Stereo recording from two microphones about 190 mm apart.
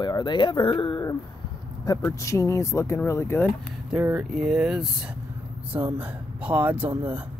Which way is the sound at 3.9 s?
5° right (ahead or behind).